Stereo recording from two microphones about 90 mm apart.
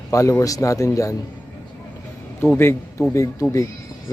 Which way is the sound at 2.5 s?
25° left (ahead or behind).